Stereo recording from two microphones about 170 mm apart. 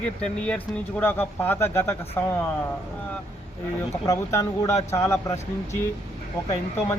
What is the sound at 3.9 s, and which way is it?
Speech, 20° left (ahead or behind).